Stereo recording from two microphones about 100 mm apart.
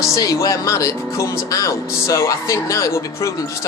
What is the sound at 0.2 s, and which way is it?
Speech, 35° left (ahead or behind).